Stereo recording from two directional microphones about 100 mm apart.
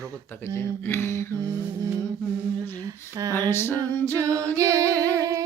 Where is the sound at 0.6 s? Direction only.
25° left (ahead or behind).